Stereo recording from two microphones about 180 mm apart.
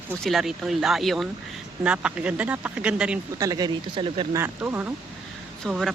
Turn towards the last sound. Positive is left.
turn(degrees=0)  # may be behind; listen again after turning